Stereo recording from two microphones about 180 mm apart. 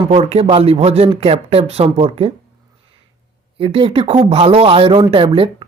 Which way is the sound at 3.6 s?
30° right (ahead or behind).